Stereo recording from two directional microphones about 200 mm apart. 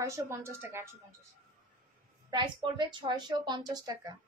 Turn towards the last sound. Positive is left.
turn(degrees=-20)  # may be behind; listen again after turning